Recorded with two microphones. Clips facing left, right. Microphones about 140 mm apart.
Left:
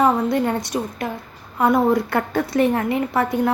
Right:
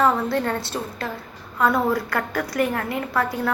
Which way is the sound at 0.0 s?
20° left (ahead or behind).